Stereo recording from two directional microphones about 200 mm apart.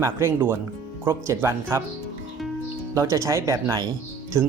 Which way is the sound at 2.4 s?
Centre (ahead or behind).